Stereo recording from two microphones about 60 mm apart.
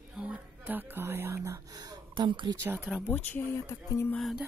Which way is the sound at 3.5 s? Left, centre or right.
Left.